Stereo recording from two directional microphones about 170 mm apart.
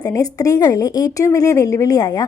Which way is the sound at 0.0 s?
20° left (ahead or behind).